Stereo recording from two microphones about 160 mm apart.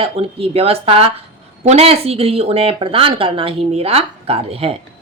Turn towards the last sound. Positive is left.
turn(degrees=-35)  # may be behind; listen again after turning